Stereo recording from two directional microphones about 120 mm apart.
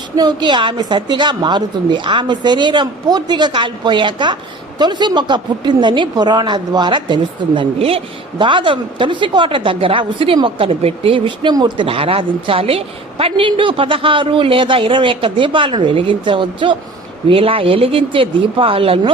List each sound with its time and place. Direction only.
0.2 s a woman's voice: 40° right (ahead or behind)